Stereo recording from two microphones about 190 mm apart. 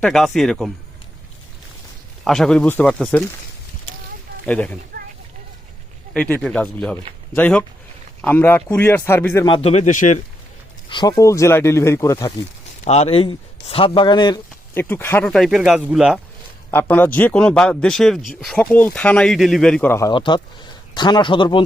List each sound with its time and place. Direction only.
0.0 s speech: centre (ahead or behind)
2.2 s speech: centre (ahead or behind)
4.4 s a man's voice: 5° left (ahead or behind)
6.1 s a man's voice: 5° left (ahead or behind)
9.6 s a man's voice: 35° left (ahead or behind)
10.8 s a man's voice: 25° left (ahead or behind)
12.8 s speech: 35° left (ahead or behind)
14.8 s speech: 10° left (ahead or behind)
16.7 s speech: 10° left (ahead or behind)